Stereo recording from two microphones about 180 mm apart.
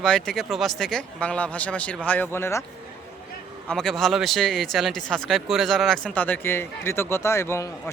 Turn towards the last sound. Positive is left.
turn(degrees=15)  # may be behind; listen again after turning